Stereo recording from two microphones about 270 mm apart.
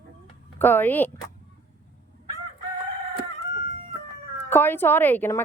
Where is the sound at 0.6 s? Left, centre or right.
Centre.